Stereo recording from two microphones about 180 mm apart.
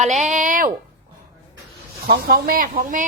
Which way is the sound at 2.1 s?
60° right (ahead or behind).